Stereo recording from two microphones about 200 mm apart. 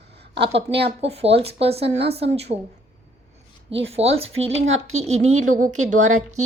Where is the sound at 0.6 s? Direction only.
60° right (ahead or behind).